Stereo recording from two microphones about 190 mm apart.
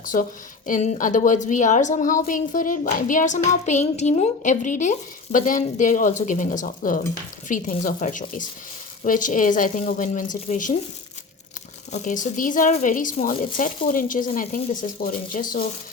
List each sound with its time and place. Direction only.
0.0 s a woman's voice: 45° left (ahead or behind)
11.9 s a woman's voice: 40° left (ahead or behind)